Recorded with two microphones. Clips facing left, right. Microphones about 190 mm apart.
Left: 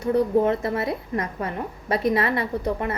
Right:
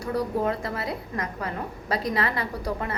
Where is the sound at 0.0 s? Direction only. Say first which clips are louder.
Left 6 dB; 25° left (ahead or behind).